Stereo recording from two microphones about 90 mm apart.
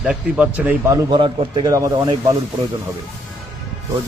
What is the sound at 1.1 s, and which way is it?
Speech, 65° right (ahead or behind).